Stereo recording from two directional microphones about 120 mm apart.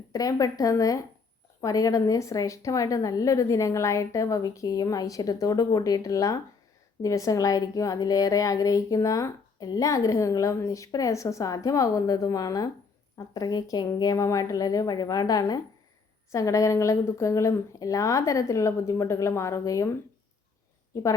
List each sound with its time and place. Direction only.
0.1 s a woman's voice: 30° left (ahead or behind)